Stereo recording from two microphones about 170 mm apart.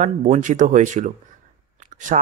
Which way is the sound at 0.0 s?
45° right (ahead or behind).